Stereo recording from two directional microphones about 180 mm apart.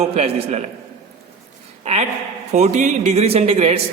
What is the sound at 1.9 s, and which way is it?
A man's voice, 40° right (ahead or behind).